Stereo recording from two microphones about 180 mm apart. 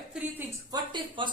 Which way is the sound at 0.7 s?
25° right (ahead or behind).